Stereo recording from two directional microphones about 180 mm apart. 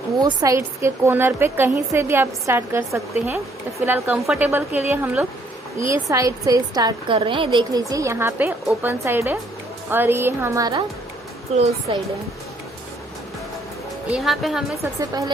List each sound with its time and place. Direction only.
0.2 s a woman's voice: 20° right (ahead or behind)
11.5 s a woman's voice: 35° right (ahead or behind)
14.1 s a woman's voice: centre (ahead or behind)
14.9 s speech: 20° right (ahead or behind)